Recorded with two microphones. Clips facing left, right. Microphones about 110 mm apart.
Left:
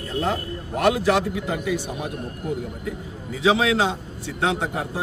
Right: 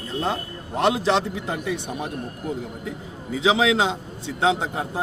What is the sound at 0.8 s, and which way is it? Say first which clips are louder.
A man's voice: left 1 dB; 25° right (ahead or behind).